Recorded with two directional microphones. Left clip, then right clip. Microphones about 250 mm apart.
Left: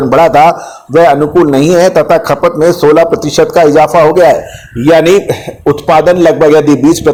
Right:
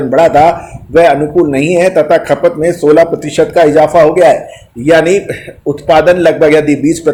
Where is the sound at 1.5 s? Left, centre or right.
Centre.